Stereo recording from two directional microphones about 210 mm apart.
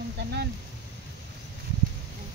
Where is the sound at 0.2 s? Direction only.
50° right (ahead or behind).